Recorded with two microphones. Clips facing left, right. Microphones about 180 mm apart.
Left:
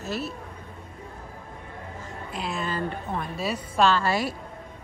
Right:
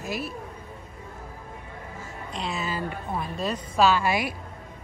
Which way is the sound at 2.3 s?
Centre (ahead or behind).